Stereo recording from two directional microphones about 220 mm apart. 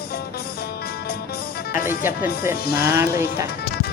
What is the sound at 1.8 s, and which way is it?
Speech, 10° right (ahead or behind).